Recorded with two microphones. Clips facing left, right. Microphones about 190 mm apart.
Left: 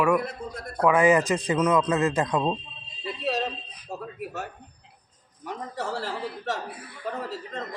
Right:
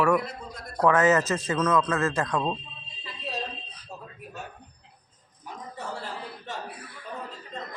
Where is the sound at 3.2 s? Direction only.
75° left (ahead or behind); by 6.6 s 90° left.